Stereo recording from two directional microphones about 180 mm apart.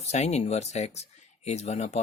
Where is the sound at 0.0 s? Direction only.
40° left (ahead or behind).